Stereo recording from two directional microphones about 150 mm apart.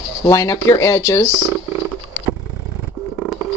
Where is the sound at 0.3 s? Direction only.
20° left (ahead or behind).